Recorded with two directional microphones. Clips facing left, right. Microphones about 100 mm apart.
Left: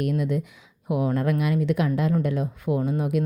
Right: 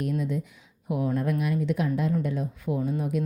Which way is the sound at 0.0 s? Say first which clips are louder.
Left 4 dB; 70° left (ahead or behind).